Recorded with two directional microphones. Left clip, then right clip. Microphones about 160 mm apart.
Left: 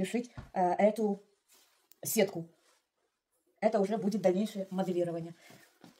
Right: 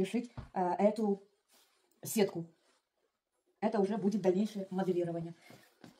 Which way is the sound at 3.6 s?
50° left (ahead or behind).